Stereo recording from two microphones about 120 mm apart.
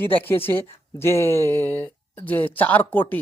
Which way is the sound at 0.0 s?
20° left (ahead or behind).